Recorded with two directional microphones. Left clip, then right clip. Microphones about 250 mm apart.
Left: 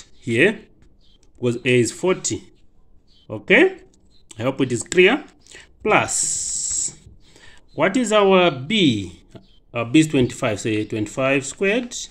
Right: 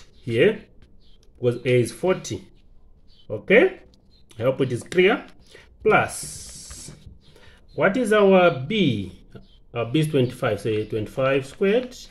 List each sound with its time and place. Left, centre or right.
0.2 s speech: left